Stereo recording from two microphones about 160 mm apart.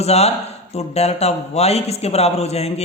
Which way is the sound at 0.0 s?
40° left (ahead or behind).